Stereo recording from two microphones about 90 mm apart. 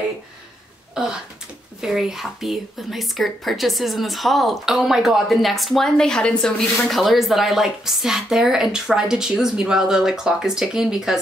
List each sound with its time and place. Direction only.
1.8 s speech: 5° right (ahead or behind)